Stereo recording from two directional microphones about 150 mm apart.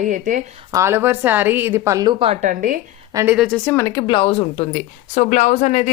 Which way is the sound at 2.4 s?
60° right (ahead or behind).